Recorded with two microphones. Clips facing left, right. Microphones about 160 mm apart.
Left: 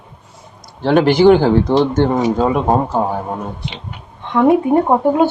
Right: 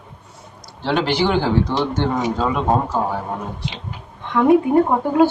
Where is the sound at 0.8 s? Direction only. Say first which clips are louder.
Left 8 dB; 50° left (ahead or behind).